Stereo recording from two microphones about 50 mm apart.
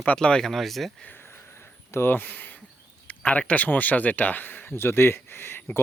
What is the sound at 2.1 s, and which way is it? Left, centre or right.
Speech, left.